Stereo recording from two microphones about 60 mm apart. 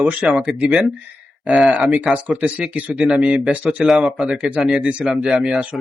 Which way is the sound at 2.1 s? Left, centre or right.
Right.